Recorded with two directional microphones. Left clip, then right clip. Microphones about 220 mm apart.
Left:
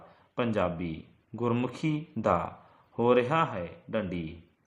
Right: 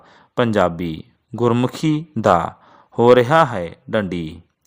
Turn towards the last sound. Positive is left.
turn(degrees=-45)  # may be behind; listen again after turning